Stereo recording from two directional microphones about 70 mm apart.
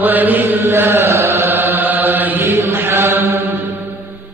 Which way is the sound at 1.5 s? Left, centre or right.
Right.